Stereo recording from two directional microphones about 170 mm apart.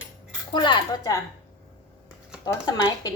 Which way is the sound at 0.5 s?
25° left (ahead or behind).